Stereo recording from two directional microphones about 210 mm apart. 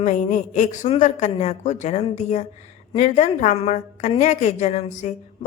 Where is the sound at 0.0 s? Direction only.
35° left (ahead or behind).